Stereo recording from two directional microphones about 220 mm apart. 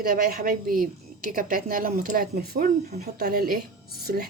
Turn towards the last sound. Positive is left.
turn(degrees=-45)  # may be behind; listen again after turning